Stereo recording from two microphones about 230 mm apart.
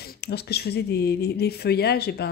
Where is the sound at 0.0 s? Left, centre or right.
Left.